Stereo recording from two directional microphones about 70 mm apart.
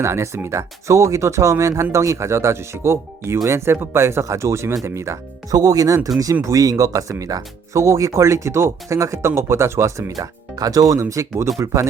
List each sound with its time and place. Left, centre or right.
0.0 s speech: right
5.5 s speech: right
10.2 s speech: right